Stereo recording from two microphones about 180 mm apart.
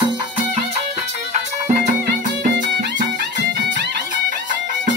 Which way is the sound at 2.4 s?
70° right (ahead or behind).